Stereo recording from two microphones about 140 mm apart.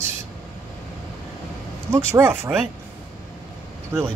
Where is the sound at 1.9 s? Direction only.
15° right (ahead or behind).